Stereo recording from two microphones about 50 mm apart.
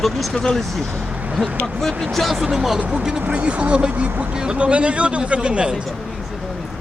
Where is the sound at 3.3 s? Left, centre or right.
Right.